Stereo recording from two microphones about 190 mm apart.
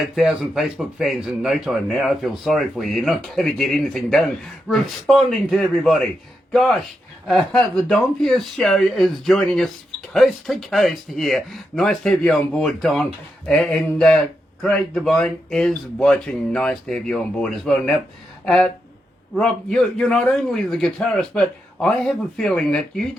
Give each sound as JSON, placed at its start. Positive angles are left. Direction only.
{"t": 0.0, "sound": "speech", "side_deg": -5}